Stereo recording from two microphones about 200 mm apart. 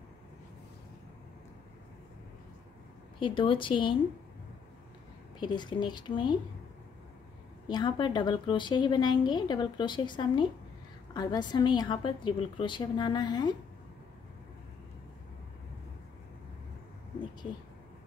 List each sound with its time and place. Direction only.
3.2 s a woman's voice: 25° left (ahead or behind)
5.4 s a woman's voice: 20° left (ahead or behind)
7.6 s a woman's voice: 20° left (ahead or behind)